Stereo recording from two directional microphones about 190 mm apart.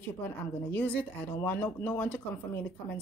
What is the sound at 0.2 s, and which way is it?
Speech, 10° left (ahead or behind).